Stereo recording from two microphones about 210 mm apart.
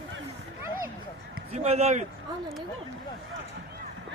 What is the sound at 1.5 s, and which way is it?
Speech, 30° right (ahead or behind).